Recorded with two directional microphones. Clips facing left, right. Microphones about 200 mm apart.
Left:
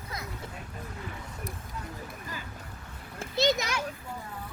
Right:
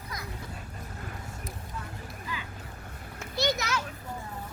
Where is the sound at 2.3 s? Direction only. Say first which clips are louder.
Right 5 dB; 45° left (ahead or behind).